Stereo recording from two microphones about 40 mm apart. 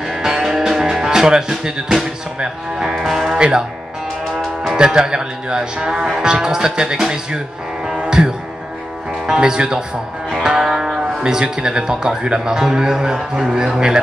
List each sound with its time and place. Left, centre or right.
0.1 s music: centre
2.9 s music: centre
3.3 s speech: right
4.7 s a man's voice: centre
8.2 s music: centre
9.2 s a man's voice: centre
10.4 s music: centre
11.1 s a man's voice: centre